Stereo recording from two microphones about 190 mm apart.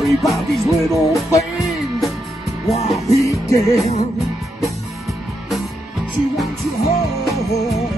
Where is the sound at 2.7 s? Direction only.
35° left (ahead or behind).